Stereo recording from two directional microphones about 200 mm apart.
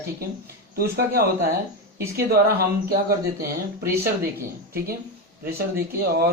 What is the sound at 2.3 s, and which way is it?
Speech, 50° right (ahead or behind).